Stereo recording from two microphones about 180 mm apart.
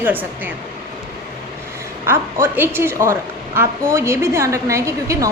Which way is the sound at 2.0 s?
15° right (ahead or behind).